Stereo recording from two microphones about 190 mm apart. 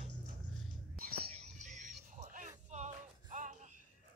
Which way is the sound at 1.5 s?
40° right (ahead or behind).